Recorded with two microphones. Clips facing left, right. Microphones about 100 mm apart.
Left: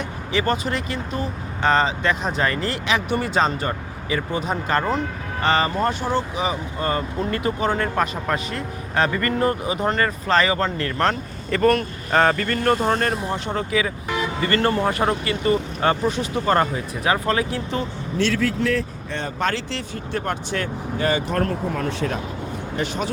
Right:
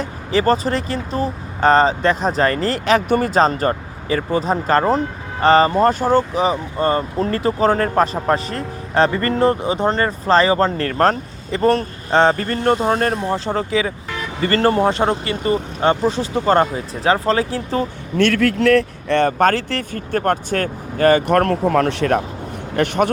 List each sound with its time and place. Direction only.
0.0 s speech: 35° right (ahead or behind)
11.5 s speech: 30° right (ahead or behind)
13.2 s speech: 30° right (ahead or behind)
18.2 s a man's voice: 60° right (ahead or behind)